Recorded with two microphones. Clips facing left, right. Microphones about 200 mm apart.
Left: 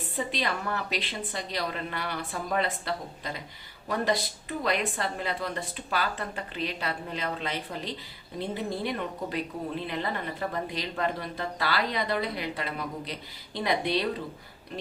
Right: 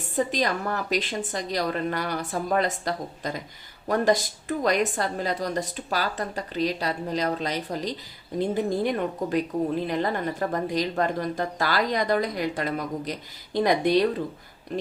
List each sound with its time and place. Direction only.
0.2 s a woman's voice: 45° right (ahead or behind)